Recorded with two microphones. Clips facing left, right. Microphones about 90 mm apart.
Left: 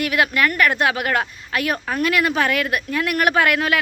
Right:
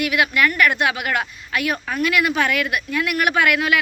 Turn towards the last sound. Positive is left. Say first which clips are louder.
# even
turn(degrees=35)  # may be behind; listen again after turning